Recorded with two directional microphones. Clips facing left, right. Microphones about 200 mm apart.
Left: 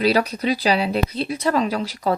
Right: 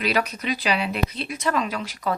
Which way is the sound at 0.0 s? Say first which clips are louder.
Left 6 dB; 35° left (ahead or behind).